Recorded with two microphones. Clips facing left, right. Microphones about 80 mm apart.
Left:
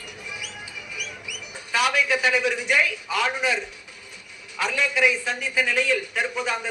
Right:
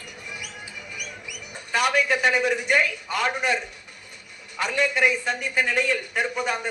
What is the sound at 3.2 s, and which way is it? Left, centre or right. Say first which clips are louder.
Speech: right 2 dB; right.